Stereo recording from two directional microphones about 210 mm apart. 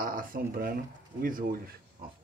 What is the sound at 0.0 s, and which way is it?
Speech, 40° right (ahead or behind).